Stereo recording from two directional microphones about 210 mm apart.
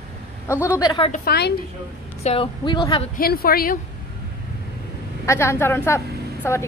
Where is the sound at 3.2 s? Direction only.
45° left (ahead or behind).